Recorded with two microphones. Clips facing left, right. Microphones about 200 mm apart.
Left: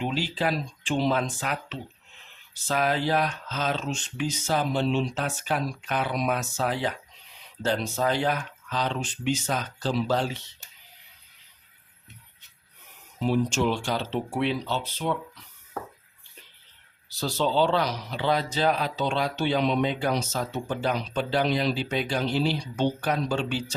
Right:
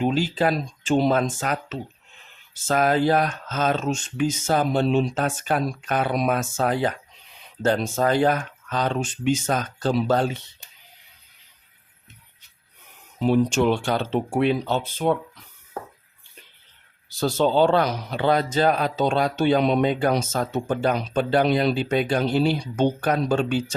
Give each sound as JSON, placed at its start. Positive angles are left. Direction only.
{"t": 0.0, "sound": "speech", "side_deg": -45}
{"t": 13.1, "sound": "speech", "side_deg": -60}
{"t": 17.1, "sound": "speech", "side_deg": -50}